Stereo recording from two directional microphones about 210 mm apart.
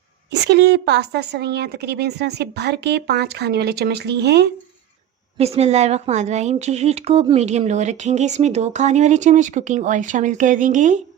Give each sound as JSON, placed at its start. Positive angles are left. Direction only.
{"t": 0.3, "sound": "a woman's voice", "side_deg": -55}
{"t": 5.4, "sound": "a woman's voice", "side_deg": -30}